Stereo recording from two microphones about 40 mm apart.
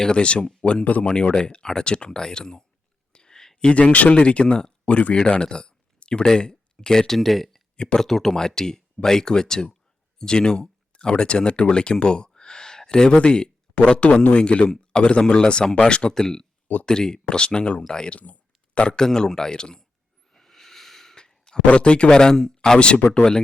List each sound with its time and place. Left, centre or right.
0.0 s speech: left
3.1 s a sound: centre
3.7 s speech: left
5.4 s a sound: left
6.3 s speech: left
7.1 s speech: centre
7.8 s speech: left
8.0 s speech: centre
18.1 s a sound: left
18.8 s speech: left
20.3 s snort: centre
21.2 s a sound: centre
21.7 s speech: left